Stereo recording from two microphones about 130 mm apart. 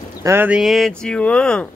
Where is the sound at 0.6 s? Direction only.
Centre (ahead or behind).